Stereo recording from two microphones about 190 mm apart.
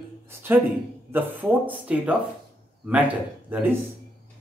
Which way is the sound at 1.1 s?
10° right (ahead or behind).